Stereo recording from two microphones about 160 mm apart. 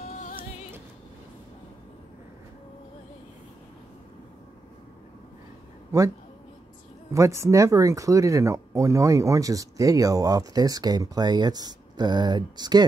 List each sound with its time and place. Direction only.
0.0 s music: 50° left (ahead or behind)
5.9 s a sound: 20° right (ahead or behind)
7.1 s speech: 20° right (ahead or behind)